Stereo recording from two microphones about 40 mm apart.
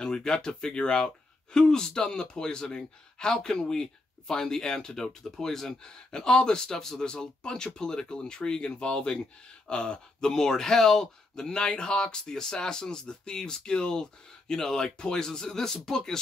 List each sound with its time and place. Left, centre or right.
0.0 s speech: centre